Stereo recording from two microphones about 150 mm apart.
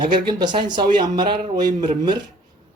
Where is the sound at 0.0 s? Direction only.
30° right (ahead or behind).